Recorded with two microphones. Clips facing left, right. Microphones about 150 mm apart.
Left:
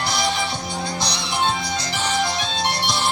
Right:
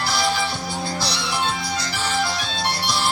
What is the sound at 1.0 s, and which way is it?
Music, 20° left (ahead or behind).